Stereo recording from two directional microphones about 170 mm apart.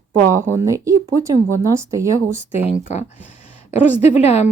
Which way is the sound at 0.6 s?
20° right (ahead or behind).